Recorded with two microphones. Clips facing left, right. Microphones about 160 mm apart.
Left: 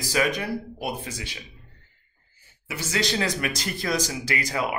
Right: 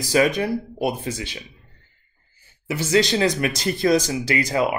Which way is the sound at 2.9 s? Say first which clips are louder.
Right 7 dB; 25° right (ahead or behind).